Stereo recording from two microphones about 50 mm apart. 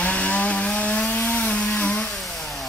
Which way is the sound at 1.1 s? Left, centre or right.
Left.